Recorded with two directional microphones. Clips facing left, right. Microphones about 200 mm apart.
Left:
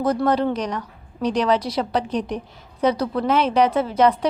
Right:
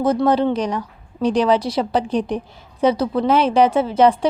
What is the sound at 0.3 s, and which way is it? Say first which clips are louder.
A woman's voice: right 3 dB; 30° right (ahead or behind).